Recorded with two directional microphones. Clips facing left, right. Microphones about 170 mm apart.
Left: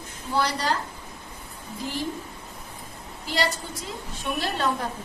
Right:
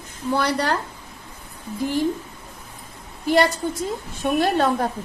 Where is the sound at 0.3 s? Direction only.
60° right (ahead or behind).